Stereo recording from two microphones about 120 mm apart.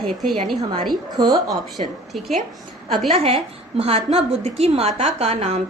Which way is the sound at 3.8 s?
60° right (ahead or behind).